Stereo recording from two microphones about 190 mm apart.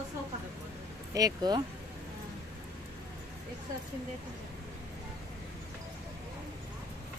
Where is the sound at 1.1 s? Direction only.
20° right (ahead or behind).